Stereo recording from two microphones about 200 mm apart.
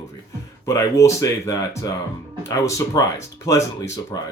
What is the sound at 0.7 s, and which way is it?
Speech, 15° left (ahead or behind).